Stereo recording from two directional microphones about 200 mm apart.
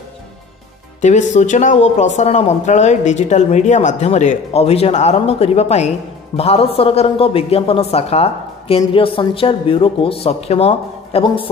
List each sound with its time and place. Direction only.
1.0 s a man's voice: 35° left (ahead or behind)